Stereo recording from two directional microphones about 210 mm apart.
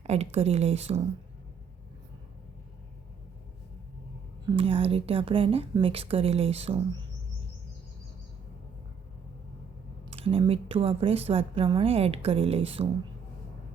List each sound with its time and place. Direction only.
0.0 s a woman's voice: 30° right (ahead or behind)
4.5 s speech: 25° right (ahead or behind)
10.1 s speech: 25° right (ahead or behind)